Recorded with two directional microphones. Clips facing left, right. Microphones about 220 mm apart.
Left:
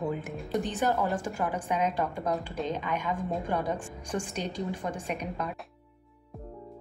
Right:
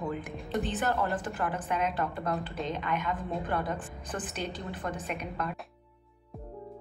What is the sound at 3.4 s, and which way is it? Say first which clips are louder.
A woman's voice: left 2 dB; 15° left (ahead or behind).